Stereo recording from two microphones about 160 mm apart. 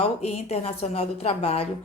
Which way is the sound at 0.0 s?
40° left (ahead or behind).